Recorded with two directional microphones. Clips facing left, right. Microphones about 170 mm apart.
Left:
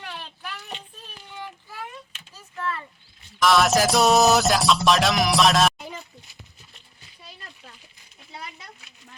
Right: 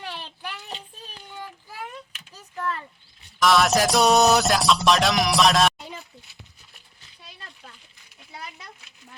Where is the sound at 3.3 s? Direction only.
Centre (ahead or behind).